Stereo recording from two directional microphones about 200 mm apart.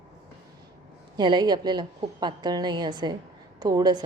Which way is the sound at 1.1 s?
20° right (ahead or behind).